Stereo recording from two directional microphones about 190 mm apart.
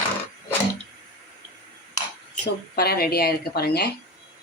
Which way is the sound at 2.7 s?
55° left (ahead or behind).